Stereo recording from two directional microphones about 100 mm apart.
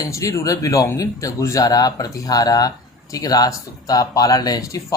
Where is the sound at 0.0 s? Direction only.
35° left (ahead or behind).